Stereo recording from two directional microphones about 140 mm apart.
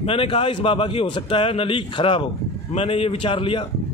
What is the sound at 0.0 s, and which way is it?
A man's voice, 40° left (ahead or behind).